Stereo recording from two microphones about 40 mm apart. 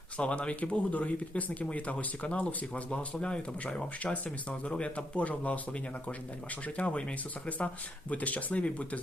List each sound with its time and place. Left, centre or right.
0.2 s speech: left
2.9 s speech: left
6.7 s speech: left
8.1 s speech: left